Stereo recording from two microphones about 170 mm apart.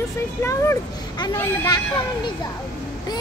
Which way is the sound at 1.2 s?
25° left (ahead or behind).